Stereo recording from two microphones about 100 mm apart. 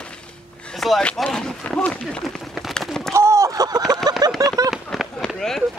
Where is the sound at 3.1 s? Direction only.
30° right (ahead or behind).